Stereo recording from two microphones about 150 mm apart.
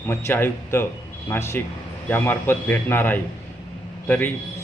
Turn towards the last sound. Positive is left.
turn(degrees=15)  # may be behind; listen again after turning